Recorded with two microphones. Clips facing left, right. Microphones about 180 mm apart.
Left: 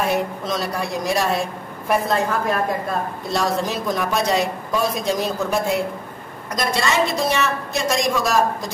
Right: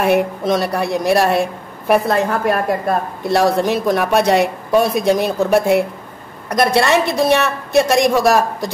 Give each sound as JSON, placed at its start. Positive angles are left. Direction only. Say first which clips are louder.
{"t": 0.0, "sound": "a woman's voice", "louder": "right 6 dB", "side_deg": -65}